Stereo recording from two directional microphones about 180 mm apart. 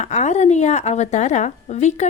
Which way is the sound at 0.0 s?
40° left (ahead or behind).